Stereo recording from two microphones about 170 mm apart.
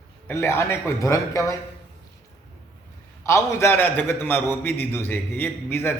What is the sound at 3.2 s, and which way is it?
A man's voice, 15° left (ahead or behind).